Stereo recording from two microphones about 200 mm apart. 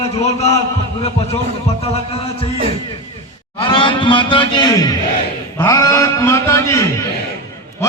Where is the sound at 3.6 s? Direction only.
25° left (ahead or behind).